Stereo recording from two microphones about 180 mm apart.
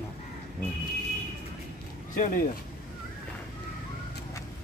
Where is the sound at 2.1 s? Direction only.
45° left (ahead or behind).